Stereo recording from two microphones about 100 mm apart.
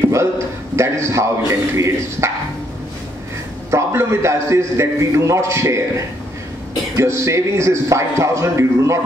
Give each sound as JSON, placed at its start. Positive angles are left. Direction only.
{"t": 0.7, "sound": "speech", "side_deg": -30}
{"t": 3.7, "sound": "speech", "side_deg": -25}
{"t": 7.0, "sound": "speech", "side_deg": -30}